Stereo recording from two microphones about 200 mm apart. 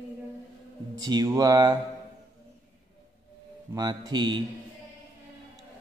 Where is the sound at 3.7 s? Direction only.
20° right (ahead or behind).